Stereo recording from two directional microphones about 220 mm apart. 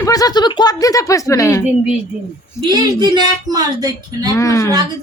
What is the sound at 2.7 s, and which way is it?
Speech, 20° right (ahead or behind).